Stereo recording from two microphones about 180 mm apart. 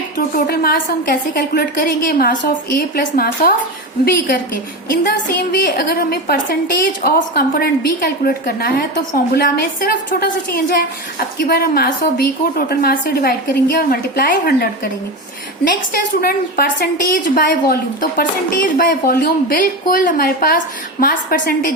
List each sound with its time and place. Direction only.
0.3 s a woman's voice: 55° left (ahead or behind)
5.0 s a woman's voice: 55° left (ahead or behind)
16.2 s a woman's voice: 55° left (ahead or behind)